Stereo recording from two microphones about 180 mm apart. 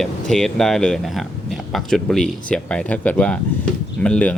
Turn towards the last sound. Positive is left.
turn(degrees=5)  # may be behind; listen again after turning